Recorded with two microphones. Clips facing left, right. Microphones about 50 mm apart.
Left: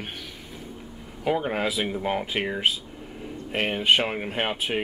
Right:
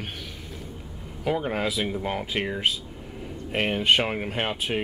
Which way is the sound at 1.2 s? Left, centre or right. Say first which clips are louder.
Left 1 dB; centre.